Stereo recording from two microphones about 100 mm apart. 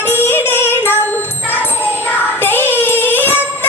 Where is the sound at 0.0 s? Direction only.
20° left (ahead or behind).